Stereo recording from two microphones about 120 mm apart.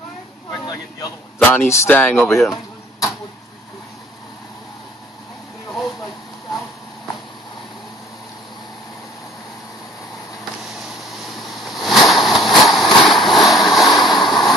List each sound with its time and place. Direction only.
1.5 s speech: 20° left (ahead or behind)
2.0 s speech: 10° left (ahead or behind)
11.0 s a sound: centre (ahead or behind)
13.0 s waves: centre (ahead or behind)